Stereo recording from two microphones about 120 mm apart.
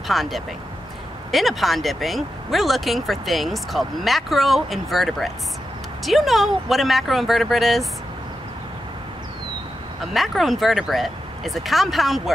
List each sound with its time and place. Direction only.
0.1 s speech: centre (ahead or behind)
10.1 s speech: centre (ahead or behind)